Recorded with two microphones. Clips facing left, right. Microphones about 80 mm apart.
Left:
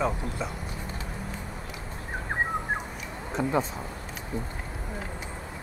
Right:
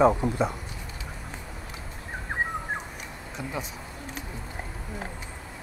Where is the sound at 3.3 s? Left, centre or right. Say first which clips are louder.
Left 9 dB; left.